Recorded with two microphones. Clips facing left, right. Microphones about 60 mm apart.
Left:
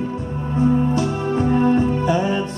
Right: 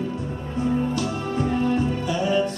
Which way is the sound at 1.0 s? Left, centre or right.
Left.